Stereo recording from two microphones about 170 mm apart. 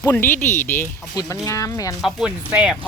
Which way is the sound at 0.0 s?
15° left (ahead or behind).